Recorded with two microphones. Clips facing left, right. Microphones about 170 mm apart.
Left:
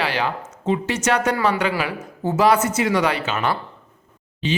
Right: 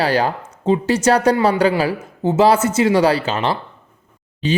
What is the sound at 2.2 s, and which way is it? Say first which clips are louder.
A man's voice: right 3 dB; 25° right (ahead or behind).